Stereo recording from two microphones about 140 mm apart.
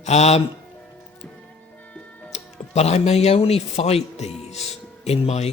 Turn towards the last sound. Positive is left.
turn(degrees=50)  # may be behind; listen again after turning